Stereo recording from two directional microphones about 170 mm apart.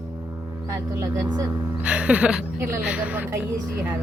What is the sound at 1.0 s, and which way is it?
Speech, 20° right (ahead or behind).